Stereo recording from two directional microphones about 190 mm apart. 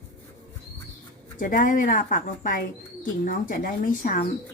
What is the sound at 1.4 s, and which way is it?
A woman's voice, 45° left (ahead or behind).